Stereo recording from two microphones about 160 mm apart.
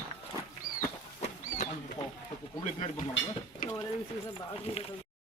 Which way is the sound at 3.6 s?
60° left (ahead or behind).